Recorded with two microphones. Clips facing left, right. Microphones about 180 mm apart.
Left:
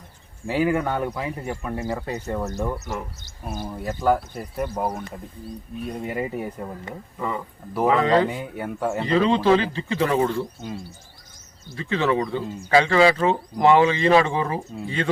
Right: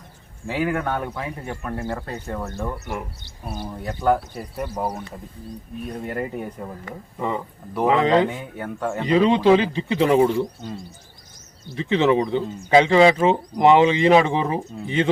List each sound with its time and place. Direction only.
0.4 s speech: 10° left (ahead or behind)
2.7 s speech: 40° left (ahead or behind)
3.8 s speech: 5° left (ahead or behind)
7.2 s speech: 20° right (ahead or behind)
8.3 s speech: 10° left (ahead or behind)
9.0 s speech: 15° right (ahead or behind)
11.8 s speech: 20° right (ahead or behind)